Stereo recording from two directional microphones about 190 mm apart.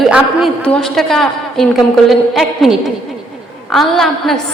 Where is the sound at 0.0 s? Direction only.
Centre (ahead or behind).